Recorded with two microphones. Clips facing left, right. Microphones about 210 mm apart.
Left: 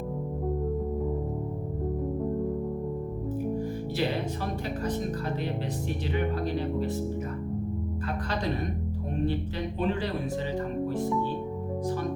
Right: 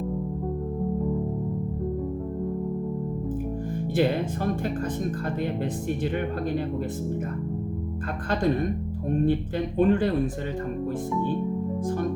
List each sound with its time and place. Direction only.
9.7 s speech: 50° right (ahead or behind)